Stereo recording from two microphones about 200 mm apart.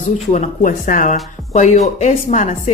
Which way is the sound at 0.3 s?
40° left (ahead or behind).